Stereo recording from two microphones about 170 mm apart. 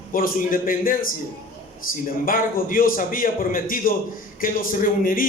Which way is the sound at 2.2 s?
55° left (ahead or behind).